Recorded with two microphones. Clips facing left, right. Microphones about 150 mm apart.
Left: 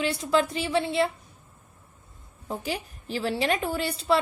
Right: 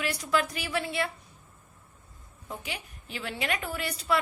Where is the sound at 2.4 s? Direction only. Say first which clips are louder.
Left 7 dB; 35° left (ahead or behind).